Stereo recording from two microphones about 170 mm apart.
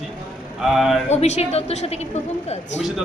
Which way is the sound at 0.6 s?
Centre (ahead or behind).